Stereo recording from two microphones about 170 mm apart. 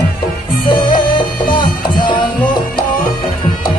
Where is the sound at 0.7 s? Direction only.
25° left (ahead or behind).